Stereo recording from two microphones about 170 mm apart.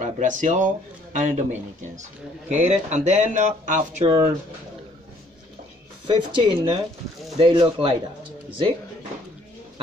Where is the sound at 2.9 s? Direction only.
45° right (ahead or behind).